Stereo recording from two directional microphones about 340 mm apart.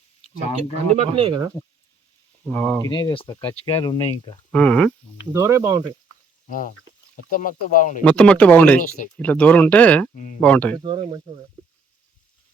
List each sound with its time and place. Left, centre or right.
0.9 s speech: centre
2.5 s speech: centre
5.3 s speech: centre
7.3 s speech: left
8.0 s speech: centre
10.8 s speech: centre